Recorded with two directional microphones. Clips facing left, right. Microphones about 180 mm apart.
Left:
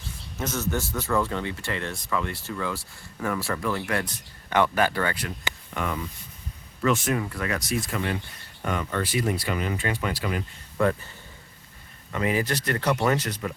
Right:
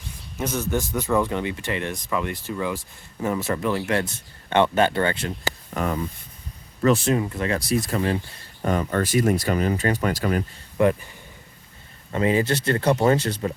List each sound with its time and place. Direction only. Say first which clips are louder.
0.3 s speech: right 3 dB; 15° right (ahead or behind)
5.5 s a sound: right 4 dB; 40° right (ahead or behind)
6.8 s speech: right 5 dB; 30° right (ahead or behind)
10.8 s speech: right 4 dB; 20° right (ahead or behind)
12.1 s speech: right 5 dB; 30° right (ahead or behind)